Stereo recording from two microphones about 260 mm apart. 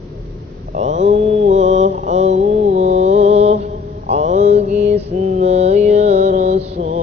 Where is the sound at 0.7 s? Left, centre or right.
Right.